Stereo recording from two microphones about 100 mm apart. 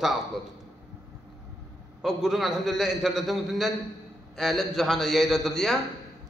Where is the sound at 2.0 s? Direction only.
5° right (ahead or behind).